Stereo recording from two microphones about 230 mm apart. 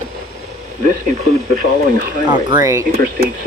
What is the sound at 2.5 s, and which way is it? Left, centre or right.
Speech, centre.